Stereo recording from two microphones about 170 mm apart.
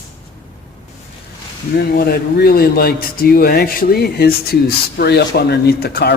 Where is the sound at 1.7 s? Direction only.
65° left (ahead or behind).